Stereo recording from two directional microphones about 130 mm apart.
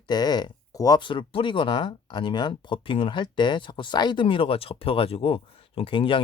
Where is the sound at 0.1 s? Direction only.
30° left (ahead or behind).